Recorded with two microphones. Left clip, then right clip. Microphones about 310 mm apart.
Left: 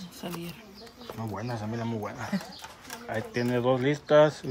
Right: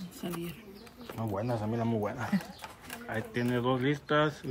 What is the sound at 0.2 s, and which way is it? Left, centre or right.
Speech, centre.